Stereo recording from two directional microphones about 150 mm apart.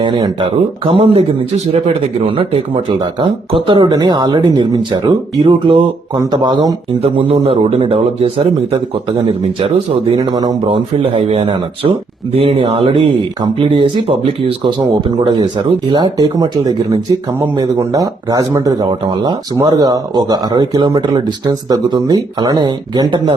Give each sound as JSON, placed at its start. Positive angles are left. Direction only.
{"t": 0.0, "sound": "speech", "side_deg": -30}
{"t": 2.2, "sound": "speech", "side_deg": -35}
{"t": 10.7, "sound": "speech", "side_deg": -40}